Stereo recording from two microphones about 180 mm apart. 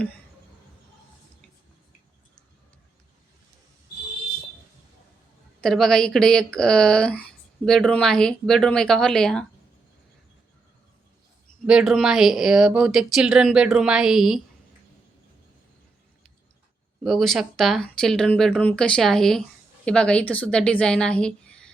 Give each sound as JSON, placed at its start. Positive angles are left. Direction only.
{"t": 5.5, "sound": "speech", "side_deg": 0}
{"t": 11.6, "sound": "speech", "side_deg": -5}
{"t": 17.0, "sound": "speech", "side_deg": 0}